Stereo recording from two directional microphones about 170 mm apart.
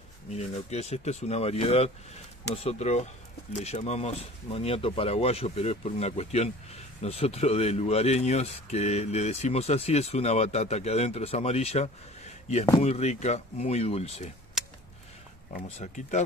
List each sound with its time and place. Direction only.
0.3 s speech: 40° left (ahead or behind)
15.8 s speech: 45° left (ahead or behind)